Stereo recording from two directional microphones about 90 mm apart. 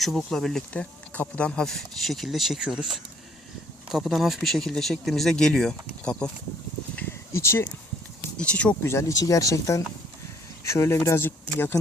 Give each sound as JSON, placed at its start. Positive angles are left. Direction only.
{"t": 0.3, "sound": "speech", "side_deg": 5}
{"t": 0.7, "sound": "speech", "side_deg": 15}
{"t": 7.3, "sound": "speech", "side_deg": 30}
{"t": 8.4, "sound": "speech", "side_deg": 15}
{"t": 8.8, "sound": "speech", "side_deg": 30}